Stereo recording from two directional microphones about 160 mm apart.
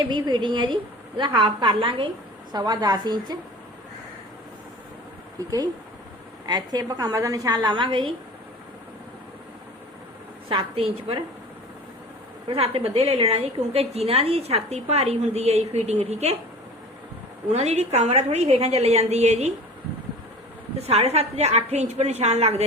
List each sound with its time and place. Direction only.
0.1 s a woman's voice: 30° right (ahead or behind)
6.4 s a woman's voice: 25° right (ahead or behind)
10.5 s a woman's voice: 35° right (ahead or behind)
12.5 s a woman's voice: 35° right (ahead or behind)
17.5 s a woman's voice: 45° right (ahead or behind)
20.7 s a woman's voice: 40° right (ahead or behind)